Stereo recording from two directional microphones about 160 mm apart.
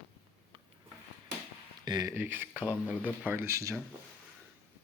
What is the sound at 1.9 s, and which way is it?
Speech, 25° right (ahead or behind).